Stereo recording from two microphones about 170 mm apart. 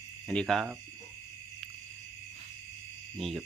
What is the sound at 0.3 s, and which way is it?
Speech, 5° left (ahead or behind).